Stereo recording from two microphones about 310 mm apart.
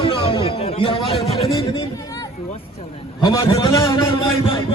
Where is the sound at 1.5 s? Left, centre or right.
Centre.